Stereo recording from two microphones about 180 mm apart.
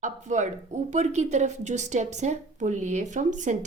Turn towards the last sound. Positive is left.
turn(degrees=-45)  # may be behind; listen again after turning